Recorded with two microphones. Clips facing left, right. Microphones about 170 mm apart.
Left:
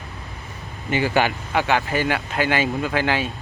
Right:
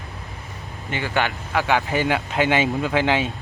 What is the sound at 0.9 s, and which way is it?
Speech, 5° left (ahead or behind).